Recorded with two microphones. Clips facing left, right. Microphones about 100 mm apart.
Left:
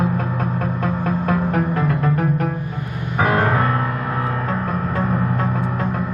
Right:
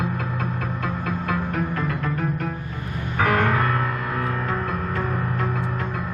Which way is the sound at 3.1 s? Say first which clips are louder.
Left 3 dB; 25° left (ahead or behind).